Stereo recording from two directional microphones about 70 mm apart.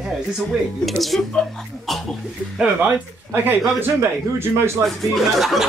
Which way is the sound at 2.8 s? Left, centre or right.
Right.